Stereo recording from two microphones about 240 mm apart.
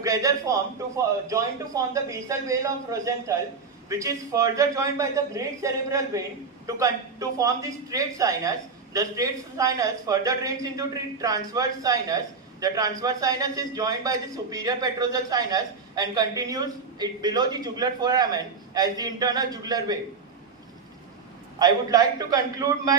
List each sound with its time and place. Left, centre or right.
0.0 s a man's voice: centre
21.6 s a man's voice: centre